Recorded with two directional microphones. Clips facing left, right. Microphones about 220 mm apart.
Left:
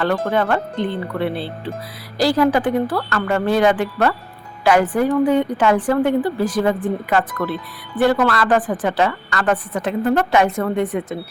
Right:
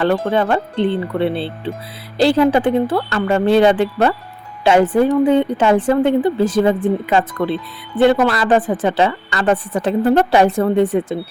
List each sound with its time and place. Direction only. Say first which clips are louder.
0.0 s a woman's voice: right 3 dB; 25° right (ahead or behind)